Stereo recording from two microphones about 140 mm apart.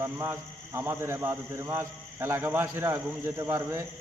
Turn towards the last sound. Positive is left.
turn(degrees=-20)  # may be behind; listen again after turning